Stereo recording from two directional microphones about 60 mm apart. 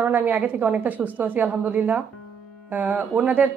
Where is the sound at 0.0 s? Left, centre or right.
Right.